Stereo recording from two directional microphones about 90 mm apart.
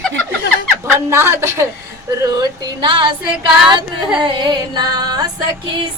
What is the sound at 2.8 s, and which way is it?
Speech, 65° right (ahead or behind).